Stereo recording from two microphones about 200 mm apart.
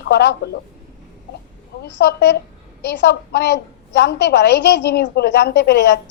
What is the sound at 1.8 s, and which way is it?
A woman's voice, 60° left (ahead or behind).